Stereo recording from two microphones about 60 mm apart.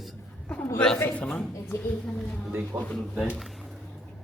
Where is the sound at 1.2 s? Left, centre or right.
Centre.